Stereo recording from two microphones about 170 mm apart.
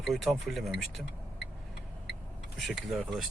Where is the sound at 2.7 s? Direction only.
Centre (ahead or behind).